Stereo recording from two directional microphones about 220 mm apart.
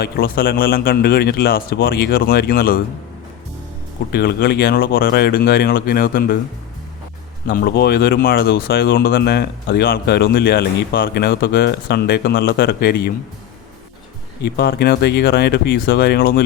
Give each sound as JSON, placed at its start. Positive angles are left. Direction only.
{"t": 0.0, "sound": "speech", "side_deg": 45}
{"t": 4.1, "sound": "speech", "side_deg": 45}
{"t": 7.4, "sound": "speech", "side_deg": 45}
{"t": 14.4, "sound": "speech", "side_deg": 45}